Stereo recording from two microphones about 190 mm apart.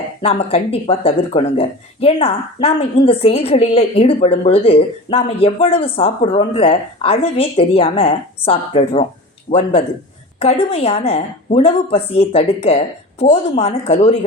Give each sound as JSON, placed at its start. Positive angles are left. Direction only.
{"t": 0.2, "sound": "a man's voice", "side_deg": 30}